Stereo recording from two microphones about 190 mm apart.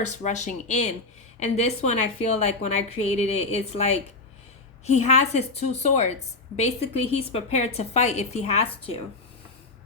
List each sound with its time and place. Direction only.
0.0 s a woman's voice: 40° left (ahead or behind)